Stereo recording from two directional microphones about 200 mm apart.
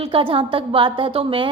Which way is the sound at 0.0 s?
25° right (ahead or behind).